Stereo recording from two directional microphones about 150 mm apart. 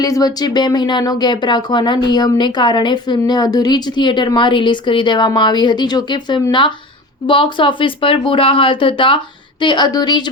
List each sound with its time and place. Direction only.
0.0 s speech: 25° left (ahead or behind)